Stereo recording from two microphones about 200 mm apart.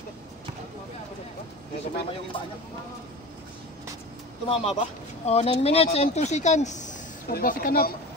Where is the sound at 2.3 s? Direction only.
25° left (ahead or behind).